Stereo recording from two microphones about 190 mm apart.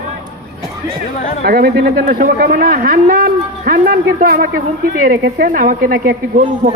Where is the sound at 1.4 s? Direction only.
55° right (ahead or behind).